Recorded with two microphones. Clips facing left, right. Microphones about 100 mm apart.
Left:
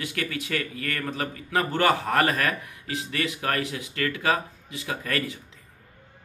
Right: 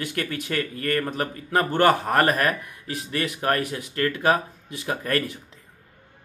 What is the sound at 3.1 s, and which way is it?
A man's voice, 35° right (ahead or behind).